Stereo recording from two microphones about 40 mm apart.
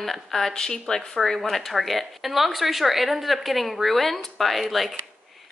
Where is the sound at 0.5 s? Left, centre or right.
Centre.